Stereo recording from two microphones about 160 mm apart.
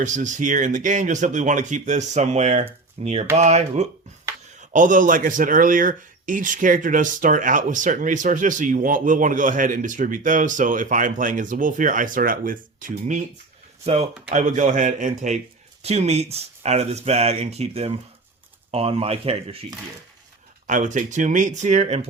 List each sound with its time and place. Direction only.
0.0 s speech: 50° right (ahead or behind)
13.8 s speech: 40° right (ahead or behind)
20.7 s speech: 50° right (ahead or behind)